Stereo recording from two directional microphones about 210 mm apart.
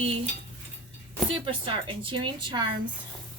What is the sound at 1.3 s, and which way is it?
A woman's voice, 25° right (ahead or behind).